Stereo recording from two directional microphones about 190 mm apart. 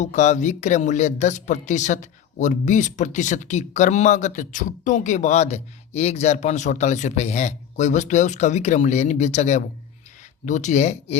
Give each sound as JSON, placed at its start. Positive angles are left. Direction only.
{"t": 0.0, "sound": "speech", "side_deg": 40}